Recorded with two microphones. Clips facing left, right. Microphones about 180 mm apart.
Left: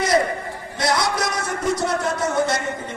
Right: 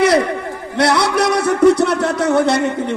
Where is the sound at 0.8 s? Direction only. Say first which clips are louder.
Right 7 dB; 65° right (ahead or behind).